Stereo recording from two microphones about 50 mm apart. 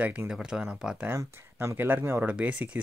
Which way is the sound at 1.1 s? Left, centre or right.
Right.